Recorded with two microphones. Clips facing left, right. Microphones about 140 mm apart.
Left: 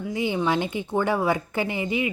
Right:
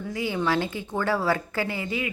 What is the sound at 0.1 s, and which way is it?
A woman's voice, 20° left (ahead or behind).